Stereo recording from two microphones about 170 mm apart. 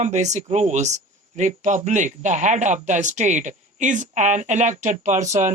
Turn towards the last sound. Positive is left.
turn(degrees=-45)  # may be behind; listen again after turning